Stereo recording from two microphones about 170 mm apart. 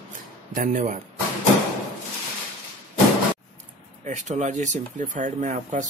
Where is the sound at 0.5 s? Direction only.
50° right (ahead or behind).